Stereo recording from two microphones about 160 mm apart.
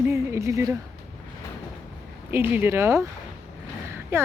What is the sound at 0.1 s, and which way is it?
Speech, 15° right (ahead or behind).